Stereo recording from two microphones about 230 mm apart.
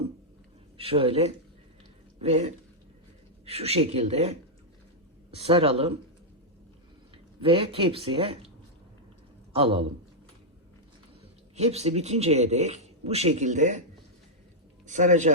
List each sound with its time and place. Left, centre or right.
0.8 s speech: right
7.4 s speech: right
9.5 s a man's voice: right
11.5 s speech: right
14.8 s speech: right